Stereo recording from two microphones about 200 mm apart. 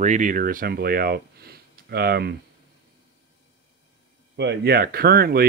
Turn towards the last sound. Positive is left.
turn(degrees=-50)  # may be behind; listen again after turning